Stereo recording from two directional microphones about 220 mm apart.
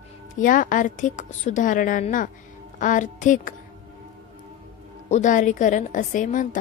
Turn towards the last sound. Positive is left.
turn(degrees=35)  # may be behind; listen again after turning